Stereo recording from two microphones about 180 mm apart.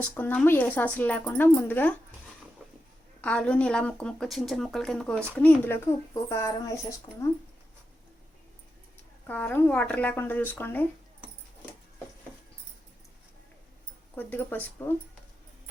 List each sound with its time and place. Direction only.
0.0 s a woman's voice: 10° left (ahead or behind)
3.2 s speech: 5° left (ahead or behind)
9.2 s a woman's voice: 10° left (ahead or behind)
14.2 s a woman's voice: 10° left (ahead or behind)